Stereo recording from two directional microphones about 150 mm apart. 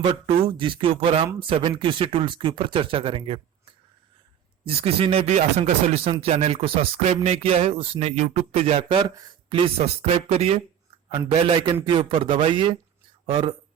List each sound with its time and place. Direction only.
0.0 s speech: 40° right (ahead or behind)
4.6 s speech: 40° right (ahead or behind)
7.1 s music: 40° right (ahead or behind)
9.0 s speech: 35° right (ahead or behind)
11.3 s speech: 35° right (ahead or behind)